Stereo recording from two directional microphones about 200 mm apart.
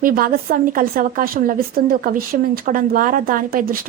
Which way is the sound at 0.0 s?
45° right (ahead or behind).